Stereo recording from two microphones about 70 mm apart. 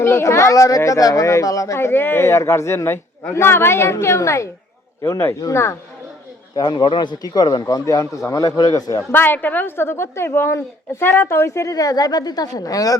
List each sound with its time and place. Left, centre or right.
0.0 s speech: left
1.9 s a woman's voice: left
6.6 s speech: left
8.5 s speech: left
9.1 s a woman's voice: left
11.7 s speech: left